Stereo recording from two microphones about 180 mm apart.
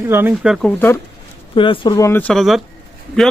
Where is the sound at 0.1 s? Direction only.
10° right (ahead or behind).